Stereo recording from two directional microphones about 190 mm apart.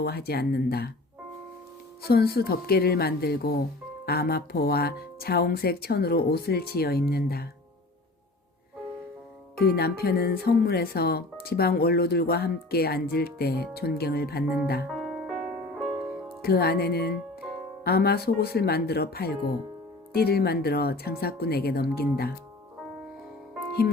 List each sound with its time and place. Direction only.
0.0 s speech: 55° left (ahead or behind)
2.0 s speech: 55° left (ahead or behind)
9.6 s speech: 55° left (ahead or behind)
14.8 s music: centre (ahead or behind)
16.4 s speech: 55° left (ahead or behind)